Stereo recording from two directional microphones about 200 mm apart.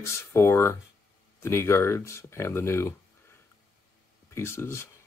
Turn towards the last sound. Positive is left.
turn(degrees=10)  # may be behind; listen again after turning